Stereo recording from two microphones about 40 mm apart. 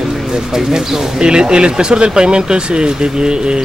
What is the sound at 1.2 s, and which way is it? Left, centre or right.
Speech, right.